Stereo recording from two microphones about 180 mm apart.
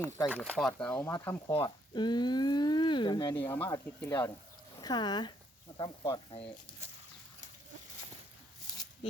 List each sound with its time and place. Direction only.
0.3 s speech: 5° left (ahead or behind)
1.5 s speech: 25° left (ahead or behind)
3.3 s speech: 10° left (ahead or behind)
4.8 s speech: 25° left (ahead or behind)